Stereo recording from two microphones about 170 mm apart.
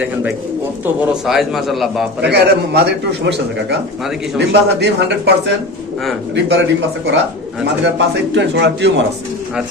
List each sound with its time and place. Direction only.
1.3 s a man's voice: centre (ahead or behind)
2.2 s a man's voice: 80° right
8.4 s a man's voice: 90° right